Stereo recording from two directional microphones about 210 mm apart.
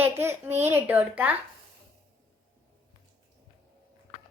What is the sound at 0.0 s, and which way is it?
A child's voice, 10° right (ahead or behind).